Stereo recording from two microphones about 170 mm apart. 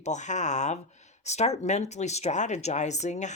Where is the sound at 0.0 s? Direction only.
45° left (ahead or behind).